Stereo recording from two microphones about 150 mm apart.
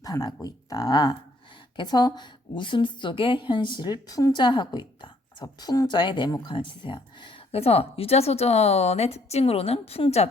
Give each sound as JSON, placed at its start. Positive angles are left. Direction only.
{"t": 0.0, "sound": "a woman's voice", "side_deg": 25}